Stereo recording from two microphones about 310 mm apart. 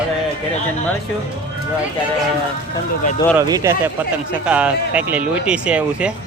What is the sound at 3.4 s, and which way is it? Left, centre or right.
A man's voice, centre.